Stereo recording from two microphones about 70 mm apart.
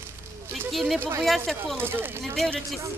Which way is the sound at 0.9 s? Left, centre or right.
Right.